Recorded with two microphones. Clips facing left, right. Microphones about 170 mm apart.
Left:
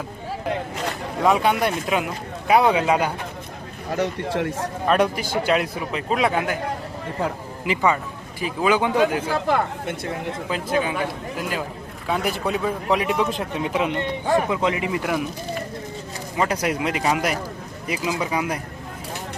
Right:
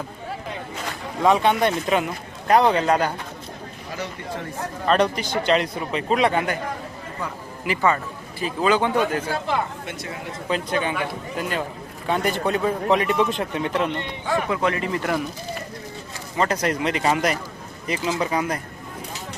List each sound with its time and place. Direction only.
1.2 s a man's voice: 5° left (ahead or behind)
4.3 s a man's voice: 85° left
4.9 s a man's voice: 5° left (ahead or behind)
8.4 s a man's voice: 10° left (ahead or behind)
9.5 s speech: 50° left (ahead or behind)
10.5 s a man's voice: 5° left (ahead or behind)
14.5 s a man's voice: 20° left (ahead or behind)
16.4 s a man's voice: 10° left (ahead or behind)